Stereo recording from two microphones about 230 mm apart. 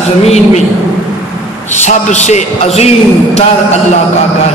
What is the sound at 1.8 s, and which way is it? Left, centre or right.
A man's voice, left.